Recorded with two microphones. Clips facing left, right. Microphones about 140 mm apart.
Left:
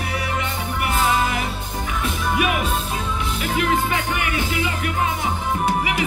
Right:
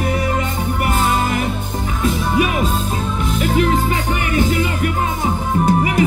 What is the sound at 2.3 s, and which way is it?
Music, 35° right (ahead or behind).